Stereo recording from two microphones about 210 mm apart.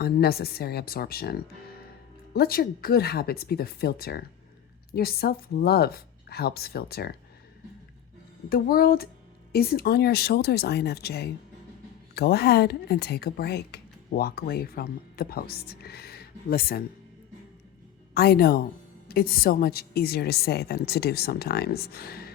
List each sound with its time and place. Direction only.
0.0 s speech: 50° left (ahead or behind)
8.4 s speech: 45° left (ahead or behind)
18.1 s speech: 45° left (ahead or behind)